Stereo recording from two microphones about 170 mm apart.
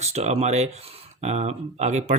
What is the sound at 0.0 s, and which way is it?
Speech, 40° right (ahead or behind).